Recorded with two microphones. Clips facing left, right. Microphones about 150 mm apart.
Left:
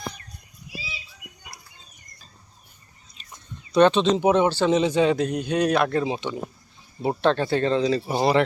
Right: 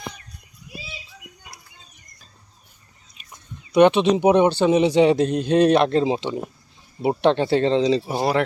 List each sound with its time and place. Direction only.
3.2 s a sound: 15° right (ahead or behind)
4.1 s speech: 15° right (ahead or behind)
7.0 s speech: 15° right (ahead or behind)
8.0 s speech: 5° right (ahead or behind)